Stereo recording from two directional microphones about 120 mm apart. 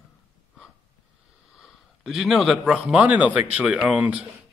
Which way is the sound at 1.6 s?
Centre (ahead or behind).